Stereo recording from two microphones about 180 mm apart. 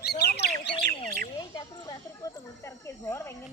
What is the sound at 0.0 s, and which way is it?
Bird, 65° left (ahead or behind).